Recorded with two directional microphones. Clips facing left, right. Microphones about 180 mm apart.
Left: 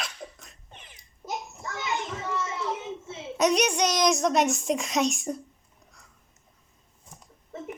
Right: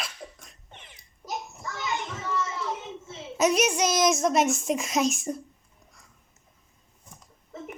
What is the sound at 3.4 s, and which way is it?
A child's voice, 5° right (ahead or behind).